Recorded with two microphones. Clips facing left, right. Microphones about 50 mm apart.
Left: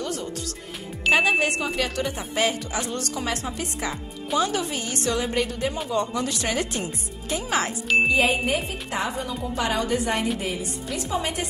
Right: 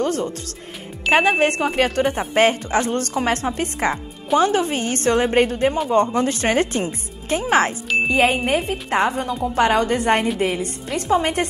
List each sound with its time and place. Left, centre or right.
0.0 s speech: right
1.1 s speech: centre
1.4 s speech: right